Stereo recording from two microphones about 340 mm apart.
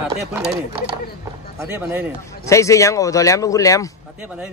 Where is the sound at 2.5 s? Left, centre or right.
Centre.